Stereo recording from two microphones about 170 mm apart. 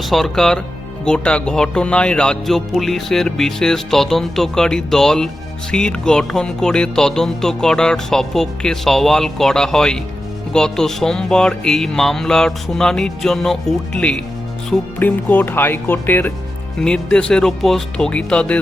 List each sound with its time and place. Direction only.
0.0 s speech: centre (ahead or behind)